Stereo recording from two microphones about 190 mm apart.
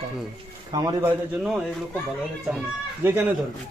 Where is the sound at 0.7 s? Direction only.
20° right (ahead or behind).